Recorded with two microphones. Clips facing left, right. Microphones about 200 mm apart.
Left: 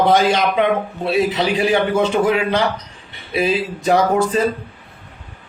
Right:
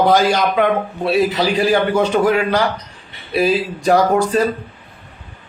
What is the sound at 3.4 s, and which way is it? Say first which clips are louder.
Speech: right 2 dB; centre (ahead or behind).